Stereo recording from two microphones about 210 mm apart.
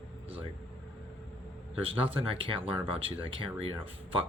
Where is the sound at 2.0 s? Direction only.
25° right (ahead or behind).